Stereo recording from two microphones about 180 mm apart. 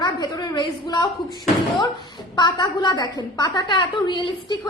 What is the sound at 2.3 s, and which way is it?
A woman's voice, 25° left (ahead or behind).